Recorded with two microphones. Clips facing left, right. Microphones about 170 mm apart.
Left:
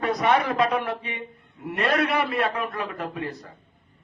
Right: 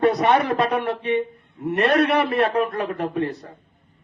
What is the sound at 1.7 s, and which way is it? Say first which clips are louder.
Speech: right 5 dB; 60° right (ahead or behind).